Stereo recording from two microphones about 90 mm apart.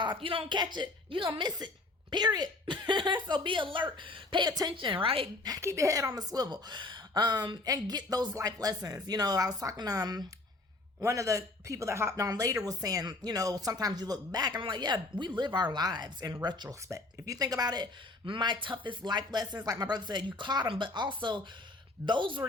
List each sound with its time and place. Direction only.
0.0 s a woman's voice: 65° right (ahead or behind); by 5.3 s 90° right
5.5 s a woman's voice: 35° right (ahead or behind)
14.6 s a woman's voice: 60° right (ahead or behind)
16.6 s a woman's voice: 35° right (ahead or behind)
18.3 s a woman's voice: 60° right (ahead or behind)